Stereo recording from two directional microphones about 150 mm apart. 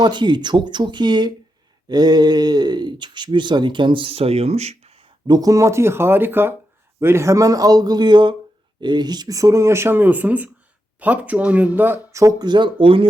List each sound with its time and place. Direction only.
0.0 s speech: 30° right (ahead or behind)